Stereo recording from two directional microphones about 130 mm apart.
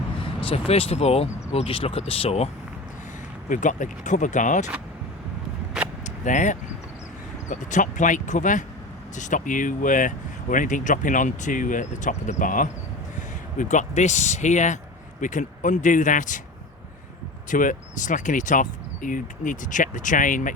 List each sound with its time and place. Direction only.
0.4 s speech: 50° left (ahead or behind)
3.5 s speech: 80° left
6.2 s speech: 70° left (ahead or behind); by 12.6 s 90° left
13.1 s speech: 70° left (ahead or behind)
15.2 s speech: 80° left
17.5 s speech: 85° left